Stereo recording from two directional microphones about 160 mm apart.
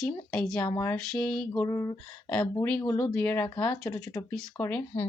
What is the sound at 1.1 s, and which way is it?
Speech, 5° left (ahead or behind).